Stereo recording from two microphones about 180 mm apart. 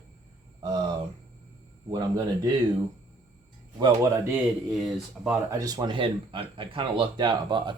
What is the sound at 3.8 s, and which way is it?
Speech, 20° right (ahead or behind).